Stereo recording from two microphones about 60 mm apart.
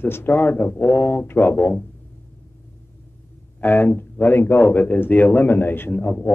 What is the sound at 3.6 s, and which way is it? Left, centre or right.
Speech, left.